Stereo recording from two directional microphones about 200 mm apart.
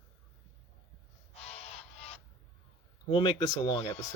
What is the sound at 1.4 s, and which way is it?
Music, 30° left (ahead or behind).